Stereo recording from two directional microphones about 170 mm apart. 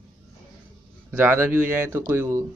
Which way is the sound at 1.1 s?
15° right (ahead or behind).